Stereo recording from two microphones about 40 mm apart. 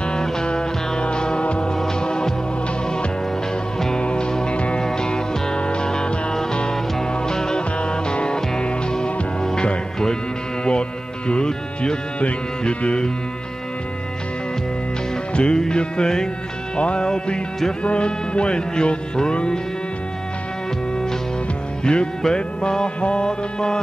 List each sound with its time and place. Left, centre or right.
0.0 s music: left
1.8 s hum: centre
3.9 s music: left
4.6 s music: left
4.8 s music: centre
15.3 s music: left
21.8 s music: left